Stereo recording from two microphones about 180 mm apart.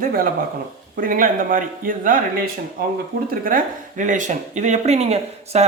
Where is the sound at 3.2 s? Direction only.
50° right (ahead or behind).